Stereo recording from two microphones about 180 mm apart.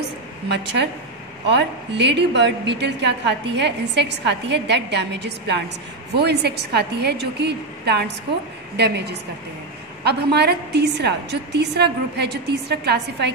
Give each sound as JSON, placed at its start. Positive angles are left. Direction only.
{"t": 1.5, "sound": "a woman's voice", "side_deg": -75}